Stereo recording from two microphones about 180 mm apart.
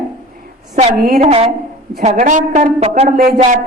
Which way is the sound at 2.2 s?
45° right (ahead or behind).